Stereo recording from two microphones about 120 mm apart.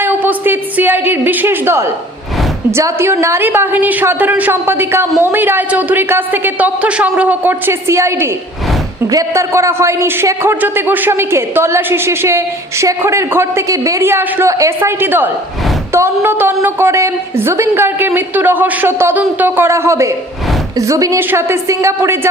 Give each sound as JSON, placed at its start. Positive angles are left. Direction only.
{"t": 0.0, "sound": "a woman's voice", "side_deg": -15}